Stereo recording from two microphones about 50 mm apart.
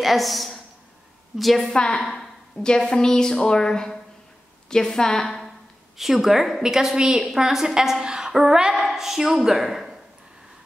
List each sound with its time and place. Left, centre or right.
0.0 s a woman's voice: centre
1.7 s a woman's voice: centre
5.9 s a woman's voice: centre